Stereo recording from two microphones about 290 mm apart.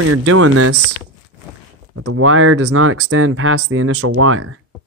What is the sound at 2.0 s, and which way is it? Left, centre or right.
Speech, right.